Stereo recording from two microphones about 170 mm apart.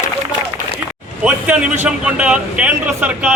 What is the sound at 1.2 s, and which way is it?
A man's voice, 5° right (ahead or behind).